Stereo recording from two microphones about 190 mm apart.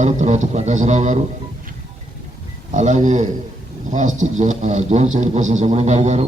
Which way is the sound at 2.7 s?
40° right (ahead or behind).